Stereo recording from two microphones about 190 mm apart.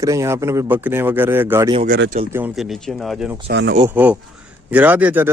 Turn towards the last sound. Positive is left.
turn(degrees=-10)  # may be behind; listen again after turning